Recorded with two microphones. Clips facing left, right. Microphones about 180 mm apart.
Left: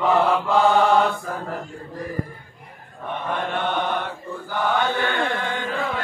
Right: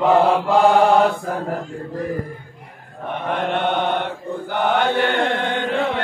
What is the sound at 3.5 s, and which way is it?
Mantra, 60° right (ahead or behind).